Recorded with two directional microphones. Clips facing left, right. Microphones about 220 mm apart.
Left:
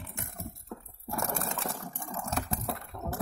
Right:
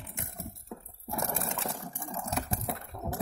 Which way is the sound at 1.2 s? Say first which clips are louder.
Even; centre (ahead or behind).